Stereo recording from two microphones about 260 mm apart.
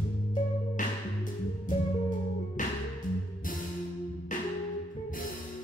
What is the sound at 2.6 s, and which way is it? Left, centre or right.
Music, left.